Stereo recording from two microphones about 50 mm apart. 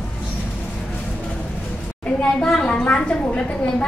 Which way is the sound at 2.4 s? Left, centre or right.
Centre.